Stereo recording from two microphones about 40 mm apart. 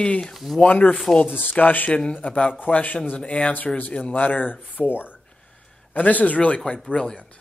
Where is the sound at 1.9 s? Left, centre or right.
Left.